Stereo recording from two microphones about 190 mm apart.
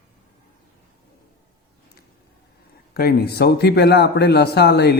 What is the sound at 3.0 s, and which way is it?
A man's voice, 55° left (ahead or behind).